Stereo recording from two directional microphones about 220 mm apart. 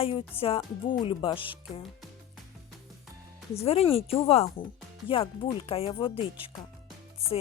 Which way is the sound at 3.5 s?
25° left (ahead or behind).